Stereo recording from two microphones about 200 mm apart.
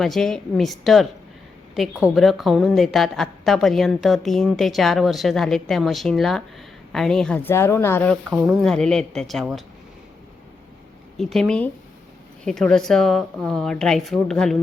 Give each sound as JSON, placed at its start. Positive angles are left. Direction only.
{"t": 0.0, "sound": "a woman's voice", "side_deg": 0}
{"t": 11.2, "sound": "a woman's voice", "side_deg": 0}